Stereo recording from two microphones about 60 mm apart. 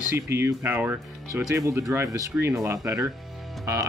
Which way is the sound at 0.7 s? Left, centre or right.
Right.